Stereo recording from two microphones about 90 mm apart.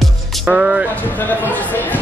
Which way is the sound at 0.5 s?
10° right (ahead or behind).